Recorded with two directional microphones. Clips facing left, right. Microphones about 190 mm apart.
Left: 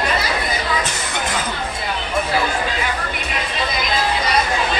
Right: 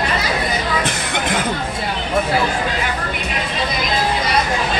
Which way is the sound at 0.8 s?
60° right (ahead or behind).